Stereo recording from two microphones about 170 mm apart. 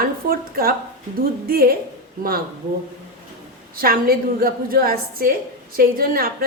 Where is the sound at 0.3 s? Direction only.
60° right (ahead or behind).